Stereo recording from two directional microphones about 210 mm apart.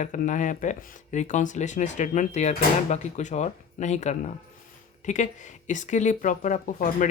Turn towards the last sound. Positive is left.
turn(degrees=35)  # may be behind; listen again after turning